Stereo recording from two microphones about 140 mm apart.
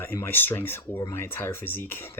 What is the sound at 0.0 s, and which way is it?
Speech, 15° left (ahead or behind).